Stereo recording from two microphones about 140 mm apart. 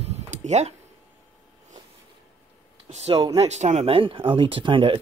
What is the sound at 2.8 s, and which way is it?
Speech, 50° right (ahead or behind).